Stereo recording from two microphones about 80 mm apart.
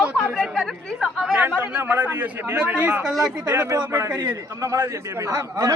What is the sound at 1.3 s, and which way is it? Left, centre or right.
A man's voice, right.